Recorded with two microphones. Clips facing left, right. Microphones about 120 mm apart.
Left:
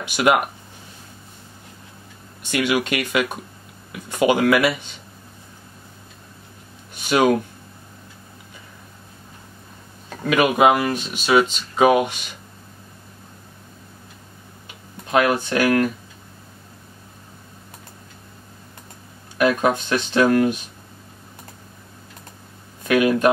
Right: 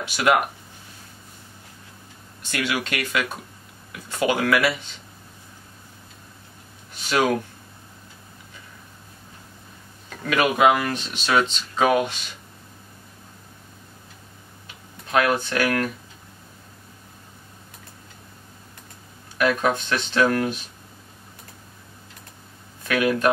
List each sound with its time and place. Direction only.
0.0 s speech: 20° left (ahead or behind)
2.5 s speech: 15° left (ahead or behind)
7.1 s speech: 15° left (ahead or behind)
10.2 s speech: 15° left (ahead or behind)
15.0 s speech: 25° left (ahead or behind)
19.3 s speech: 20° left (ahead or behind)
22.8 s speech: 20° left (ahead or behind)